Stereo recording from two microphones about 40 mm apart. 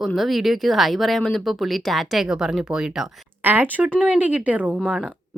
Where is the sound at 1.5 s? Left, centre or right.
Centre.